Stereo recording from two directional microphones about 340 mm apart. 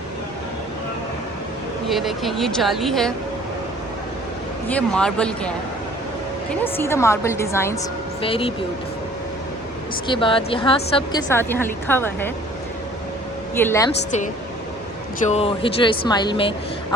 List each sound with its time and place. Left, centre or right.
1.9 s speech: centre
4.7 s speech: centre
6.5 s a woman's voice: centre
10.1 s a woman's voice: centre
13.6 s a woman's voice: centre
15.3 s a woman's voice: centre